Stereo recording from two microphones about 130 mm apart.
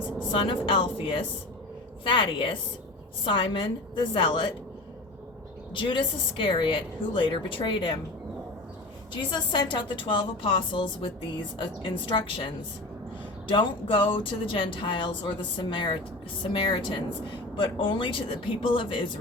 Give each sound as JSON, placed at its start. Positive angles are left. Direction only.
{"t": 0.3, "sound": "a woman's voice", "side_deg": 40}
{"t": 5.7, "sound": "a woman's voice", "side_deg": 40}
{"t": 9.3, "sound": "a woman's voice", "side_deg": 35}
{"t": 13.5, "sound": "a woman's voice", "side_deg": 40}